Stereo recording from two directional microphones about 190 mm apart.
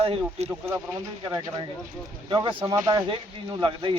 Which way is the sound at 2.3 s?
25° right (ahead or behind).